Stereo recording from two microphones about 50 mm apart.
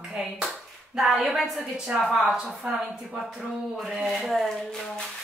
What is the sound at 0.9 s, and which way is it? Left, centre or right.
A woman's voice, centre.